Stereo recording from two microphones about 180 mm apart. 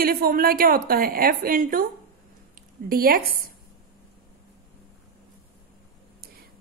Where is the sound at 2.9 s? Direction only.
55° right (ahead or behind).